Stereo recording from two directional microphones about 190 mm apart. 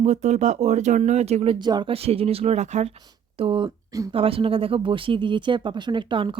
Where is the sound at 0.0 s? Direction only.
35° right (ahead or behind).